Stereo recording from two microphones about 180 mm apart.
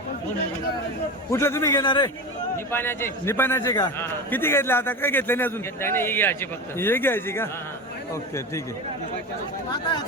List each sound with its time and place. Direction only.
1.3 s a man's voice: 15° left (ahead or behind)
2.7 s a man's voice: 10° left (ahead or behind)